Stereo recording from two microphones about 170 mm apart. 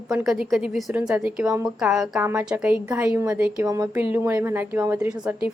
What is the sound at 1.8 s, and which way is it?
A woman's voice, 5° right (ahead or behind).